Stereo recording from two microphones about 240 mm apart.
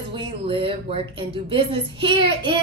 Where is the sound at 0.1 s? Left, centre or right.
Right.